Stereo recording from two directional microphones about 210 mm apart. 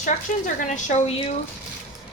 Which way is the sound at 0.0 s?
40° left (ahead or behind).